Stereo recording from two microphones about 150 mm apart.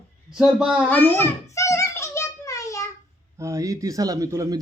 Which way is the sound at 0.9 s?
15° left (ahead or behind).